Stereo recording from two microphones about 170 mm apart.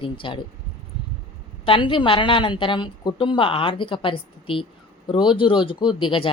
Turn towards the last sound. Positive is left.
turn(degrees=30)  # may be behind; listen again after turning